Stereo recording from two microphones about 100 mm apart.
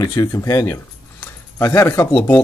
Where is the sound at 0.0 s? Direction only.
30° left (ahead or behind).